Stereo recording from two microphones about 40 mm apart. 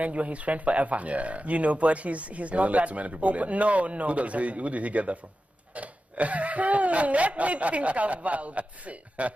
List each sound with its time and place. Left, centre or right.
0.0 s speech: right